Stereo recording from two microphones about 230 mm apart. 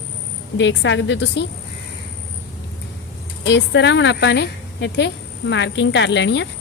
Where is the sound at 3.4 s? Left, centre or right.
Left.